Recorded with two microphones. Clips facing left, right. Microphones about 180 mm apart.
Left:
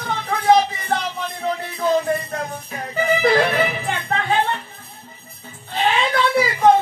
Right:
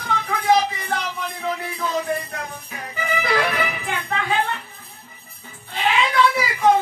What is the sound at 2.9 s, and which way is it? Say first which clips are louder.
Music: left 6 dB; 35° left (ahead or behind).